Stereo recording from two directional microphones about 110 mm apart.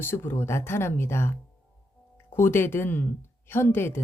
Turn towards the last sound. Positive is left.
turn(degrees=20)  # may be behind; listen again after turning